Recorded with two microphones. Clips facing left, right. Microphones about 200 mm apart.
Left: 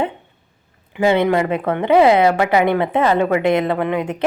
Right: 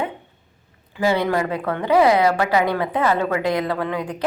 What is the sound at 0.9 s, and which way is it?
Speech, 20° left (ahead or behind).